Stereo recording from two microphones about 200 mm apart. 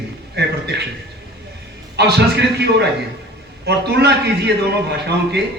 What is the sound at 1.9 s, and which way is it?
A man's voice, 55° right (ahead or behind).